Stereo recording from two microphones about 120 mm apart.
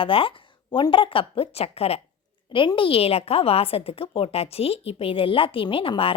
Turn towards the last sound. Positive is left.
turn(degrees=50)  # may be behind; listen again after turning